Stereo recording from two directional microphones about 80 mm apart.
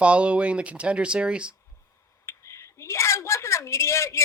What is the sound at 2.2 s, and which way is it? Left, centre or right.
A woman's voice, left.